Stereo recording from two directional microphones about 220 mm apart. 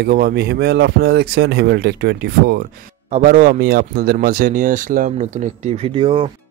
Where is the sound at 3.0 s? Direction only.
35° right (ahead or behind).